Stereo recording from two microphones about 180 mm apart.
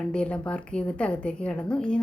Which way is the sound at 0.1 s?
5° left (ahead or behind).